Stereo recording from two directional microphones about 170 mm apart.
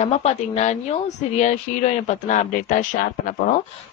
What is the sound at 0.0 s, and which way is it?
Speech, 40° left (ahead or behind).